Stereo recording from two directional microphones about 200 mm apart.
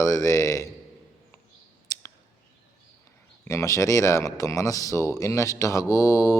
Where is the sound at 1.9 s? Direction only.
15° left (ahead or behind).